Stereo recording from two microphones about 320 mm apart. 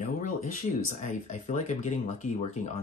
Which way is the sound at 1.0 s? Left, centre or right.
Left.